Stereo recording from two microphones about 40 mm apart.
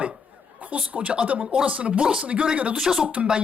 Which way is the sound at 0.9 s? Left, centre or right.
Right.